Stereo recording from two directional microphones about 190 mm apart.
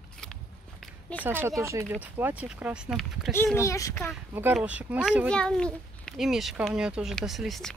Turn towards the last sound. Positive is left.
turn(degrees=0)  # may be behind; listen again after turning